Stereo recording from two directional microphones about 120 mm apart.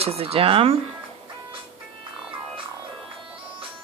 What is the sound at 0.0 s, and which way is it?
Speech, 55° right (ahead or behind).